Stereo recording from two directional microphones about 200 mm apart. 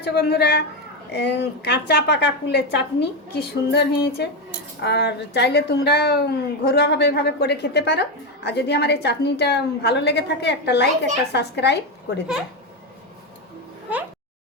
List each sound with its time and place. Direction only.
0.0 s a woman's voice: 55° left (ahead or behind)